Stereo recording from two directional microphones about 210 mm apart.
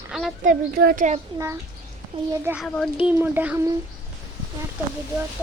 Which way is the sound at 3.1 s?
10° right (ahead or behind).